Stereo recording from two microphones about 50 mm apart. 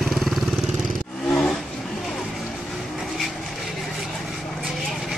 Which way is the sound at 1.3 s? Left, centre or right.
Centre.